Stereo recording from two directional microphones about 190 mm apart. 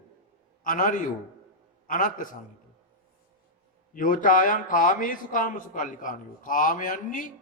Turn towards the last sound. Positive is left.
turn(degrees=45)  # may be behind; listen again after turning